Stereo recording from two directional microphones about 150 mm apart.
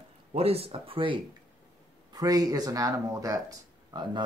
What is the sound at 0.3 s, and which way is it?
Speech, 40° right (ahead or behind).